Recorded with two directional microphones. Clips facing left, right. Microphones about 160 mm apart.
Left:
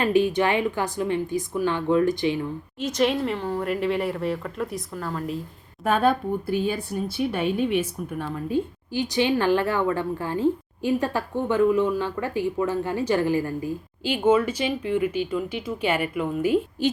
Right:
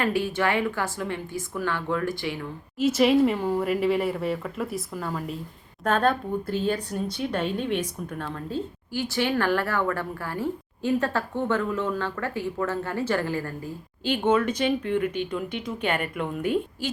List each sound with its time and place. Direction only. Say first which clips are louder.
0.0 s a woman's voice: left 4 dB; 20° left (ahead or behind)
2.7 s speech: right 4 dB; 5° right (ahead or behind)
5.8 s speech: left 2 dB; 10° left (ahead or behind)